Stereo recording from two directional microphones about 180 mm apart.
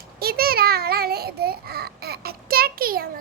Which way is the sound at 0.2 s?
60° right (ahead or behind).